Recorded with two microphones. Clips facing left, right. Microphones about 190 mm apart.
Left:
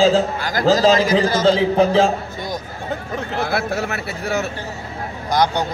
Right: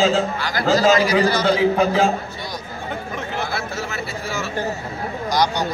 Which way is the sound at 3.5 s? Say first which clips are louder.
Left 5 dB; 65° left (ahead or behind).